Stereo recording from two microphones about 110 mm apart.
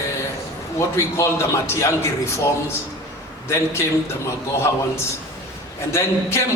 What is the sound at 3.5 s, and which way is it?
Speech, 25° left (ahead or behind).